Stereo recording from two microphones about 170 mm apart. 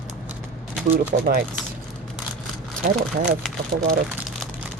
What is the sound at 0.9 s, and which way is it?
Speech, 55° right (ahead or behind).